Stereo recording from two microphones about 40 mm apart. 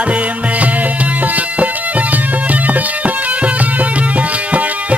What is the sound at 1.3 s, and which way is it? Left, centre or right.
Music, right.